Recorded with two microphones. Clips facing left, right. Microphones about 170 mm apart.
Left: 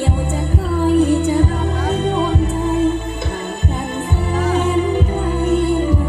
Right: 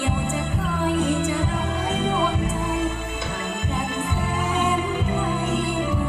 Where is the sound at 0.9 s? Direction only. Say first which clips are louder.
Left 10 dB; 35° left (ahead or behind).